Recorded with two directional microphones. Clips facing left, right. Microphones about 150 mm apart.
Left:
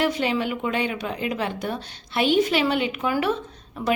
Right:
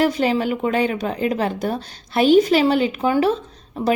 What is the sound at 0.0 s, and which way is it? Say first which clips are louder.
A woman's voice: right 5 dB; 40° right (ahead or behind).